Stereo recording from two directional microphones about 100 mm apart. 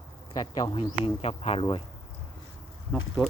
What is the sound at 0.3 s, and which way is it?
Speech, 40° left (ahead or behind).